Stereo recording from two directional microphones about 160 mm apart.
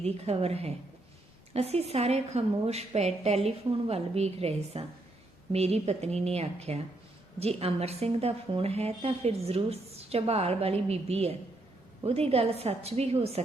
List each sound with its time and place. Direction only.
0.0 s a woman's voice: 40° right (ahead or behind)